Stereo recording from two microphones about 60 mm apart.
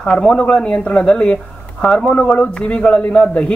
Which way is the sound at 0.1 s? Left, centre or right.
Centre.